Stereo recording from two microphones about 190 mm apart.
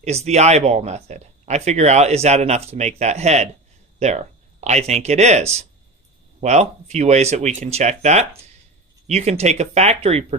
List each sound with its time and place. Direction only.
0.0 s speech: 35° right (ahead or behind)